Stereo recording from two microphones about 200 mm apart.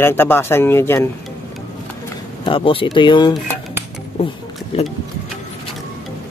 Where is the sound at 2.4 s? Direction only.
25° left (ahead or behind).